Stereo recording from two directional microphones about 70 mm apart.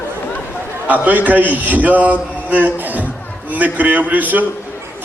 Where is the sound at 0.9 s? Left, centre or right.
Right.